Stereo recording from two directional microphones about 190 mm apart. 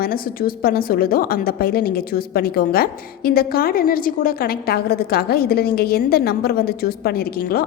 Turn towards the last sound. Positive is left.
turn(degrees=55)  # may be behind; listen again after turning